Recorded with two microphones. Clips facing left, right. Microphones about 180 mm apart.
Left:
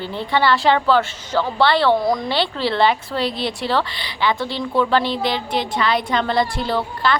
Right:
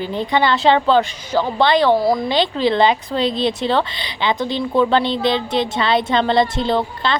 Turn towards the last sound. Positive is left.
turn(degrees=-20)  # may be behind; listen again after turning